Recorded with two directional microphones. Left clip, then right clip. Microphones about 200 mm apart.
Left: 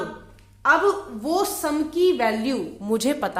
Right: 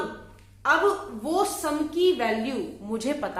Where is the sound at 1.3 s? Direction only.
45° left (ahead or behind).